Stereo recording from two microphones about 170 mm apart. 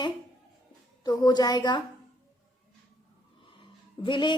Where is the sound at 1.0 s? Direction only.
25° left (ahead or behind).